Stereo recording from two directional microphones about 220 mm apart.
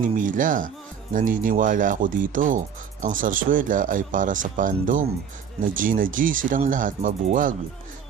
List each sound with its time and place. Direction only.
0.2 s speech: 35° right (ahead or behind)